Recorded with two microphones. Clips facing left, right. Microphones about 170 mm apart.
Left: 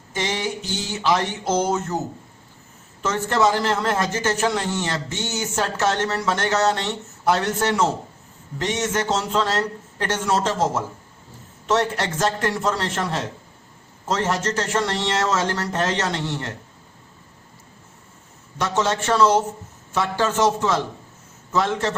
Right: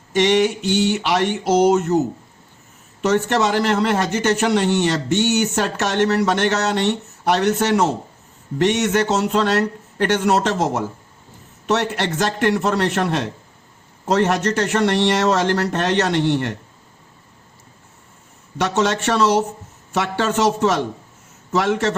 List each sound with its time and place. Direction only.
0.1 s a man's voice: 70° right (ahead or behind)
12.2 s a man's voice: 70° right (ahead or behind)
18.5 s a man's voice: 70° right (ahead or behind)